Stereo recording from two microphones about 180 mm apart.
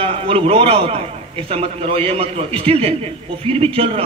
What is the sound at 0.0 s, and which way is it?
A man's voice, 30° right (ahead or behind).